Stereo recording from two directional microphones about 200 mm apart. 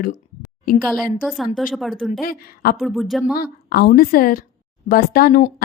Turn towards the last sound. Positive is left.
turn(degrees=45)  # may be behind; listen again after turning